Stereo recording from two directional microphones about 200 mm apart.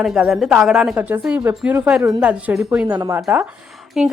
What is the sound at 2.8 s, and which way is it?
Speech, 20° right (ahead or behind).